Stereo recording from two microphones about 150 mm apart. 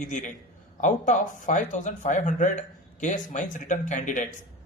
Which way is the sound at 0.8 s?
55° left (ahead or behind).